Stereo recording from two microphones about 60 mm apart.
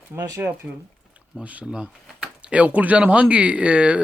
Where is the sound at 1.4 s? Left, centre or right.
Right.